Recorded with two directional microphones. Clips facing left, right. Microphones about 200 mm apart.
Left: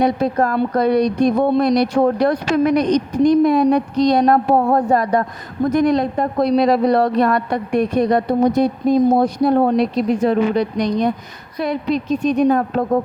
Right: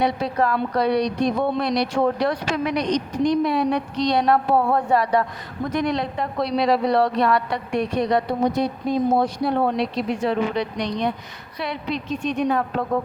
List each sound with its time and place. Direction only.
0.0 s a woman's voice: 45° left (ahead or behind)